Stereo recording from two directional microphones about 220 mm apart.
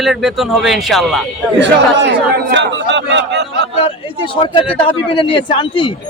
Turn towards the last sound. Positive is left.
turn(degrees=25)  # may be behind; listen again after turning